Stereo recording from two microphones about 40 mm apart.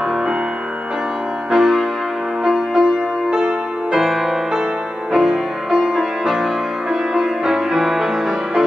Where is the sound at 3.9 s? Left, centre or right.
Centre.